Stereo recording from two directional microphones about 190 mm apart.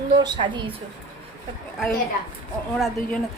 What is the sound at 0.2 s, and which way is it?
Speech, 25° right (ahead or behind).